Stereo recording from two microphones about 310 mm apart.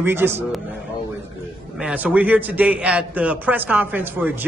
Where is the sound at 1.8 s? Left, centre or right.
Centre.